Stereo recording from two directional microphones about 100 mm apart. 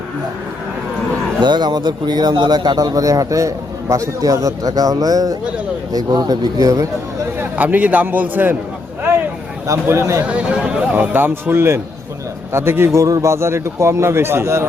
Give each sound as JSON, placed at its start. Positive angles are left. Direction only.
{"t": 1.4, "sound": "a man's voice", "side_deg": -50}
{"t": 7.3, "sound": "a man's voice", "side_deg": -20}
{"t": 9.6, "sound": "a man's voice", "side_deg": -30}
{"t": 10.2, "sound": "a man's voice", "side_deg": -10}